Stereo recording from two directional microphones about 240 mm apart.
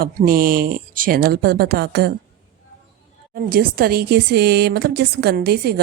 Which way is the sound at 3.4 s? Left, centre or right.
Right.